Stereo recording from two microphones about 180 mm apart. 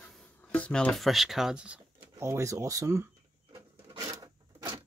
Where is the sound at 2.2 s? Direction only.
15° right (ahead or behind).